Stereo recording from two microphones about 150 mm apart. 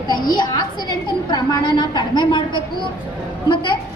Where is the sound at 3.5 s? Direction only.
30° left (ahead or behind).